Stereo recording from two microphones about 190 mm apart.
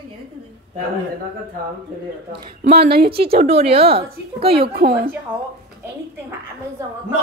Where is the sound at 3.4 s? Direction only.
30° right (ahead or behind).